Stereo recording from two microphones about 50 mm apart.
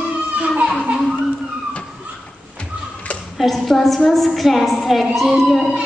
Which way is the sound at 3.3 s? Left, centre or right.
Centre.